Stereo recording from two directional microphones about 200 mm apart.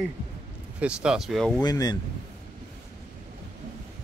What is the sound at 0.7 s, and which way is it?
Speech, 5° right (ahead or behind).